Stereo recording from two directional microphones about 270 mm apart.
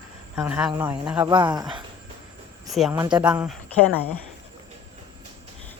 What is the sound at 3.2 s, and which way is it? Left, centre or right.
Speech, centre.